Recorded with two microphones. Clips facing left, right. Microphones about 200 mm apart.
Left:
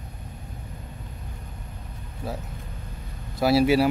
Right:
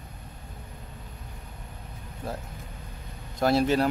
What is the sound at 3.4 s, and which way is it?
Speech, 10° left (ahead or behind).